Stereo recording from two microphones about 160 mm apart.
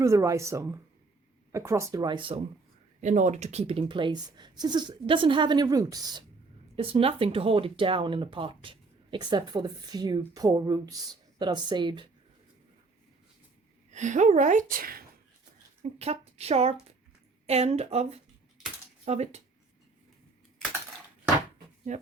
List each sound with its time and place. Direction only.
0.0 s speech: 20° right (ahead or behind)
3.0 s speech: 50° right (ahead or behind); by 6.2 s 25° right (ahead or behind)
6.7 s speech: 35° right (ahead or behind)
13.9 s speech: 50° right (ahead or behind)
15.8 s speech: 40° right (ahead or behind)
21.9 s speech: 45° right (ahead or behind)